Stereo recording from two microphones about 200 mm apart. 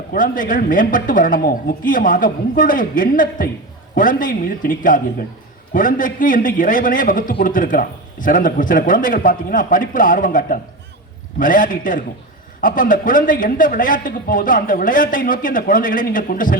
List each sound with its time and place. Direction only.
0.1 s a man's voice: 45° left (ahead or behind)